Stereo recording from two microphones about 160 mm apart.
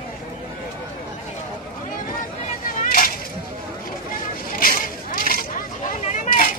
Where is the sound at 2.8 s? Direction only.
60° left (ahead or behind).